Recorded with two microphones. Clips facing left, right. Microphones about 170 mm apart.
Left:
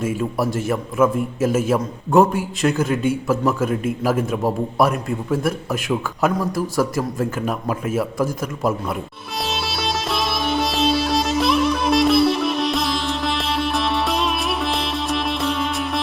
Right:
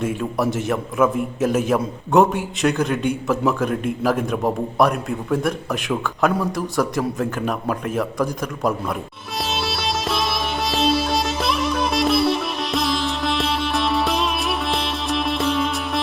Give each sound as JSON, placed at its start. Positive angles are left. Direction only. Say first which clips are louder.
{"t": 0.0, "sound": "a man's voice", "louder": "even", "side_deg": 0}
{"t": 9.4, "sound": "music", "louder": "even", "side_deg": 0}